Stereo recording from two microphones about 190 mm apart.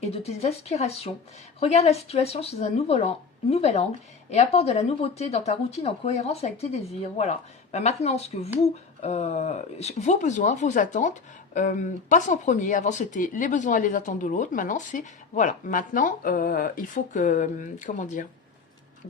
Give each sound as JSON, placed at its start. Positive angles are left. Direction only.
{"t": 0.1, "sound": "speech", "side_deg": 35}